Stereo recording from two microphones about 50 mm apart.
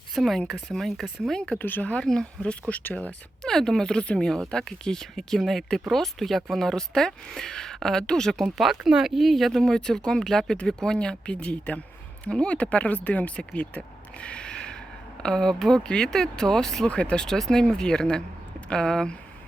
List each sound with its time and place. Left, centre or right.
0.1 s speech: centre
1.5 s speech: left
2.0 s speech: centre
3.4 s speech: centre
8.5 s speech: centre
9.6 s speech: centre
15.8 s speech: centre
16.9 s speech: left